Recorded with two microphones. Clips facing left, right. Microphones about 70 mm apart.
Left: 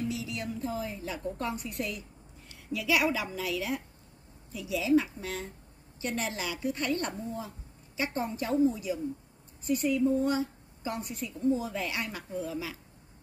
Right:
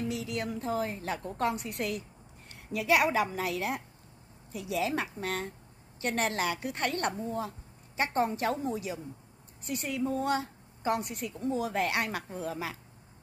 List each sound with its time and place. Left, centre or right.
0.1 s a woman's voice: right